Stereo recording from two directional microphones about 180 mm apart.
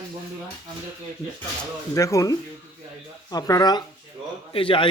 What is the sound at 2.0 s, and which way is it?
Speech, 15° left (ahead or behind).